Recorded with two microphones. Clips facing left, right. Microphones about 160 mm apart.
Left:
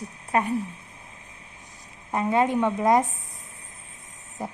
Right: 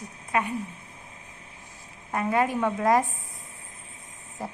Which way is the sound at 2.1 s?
25° left (ahead or behind).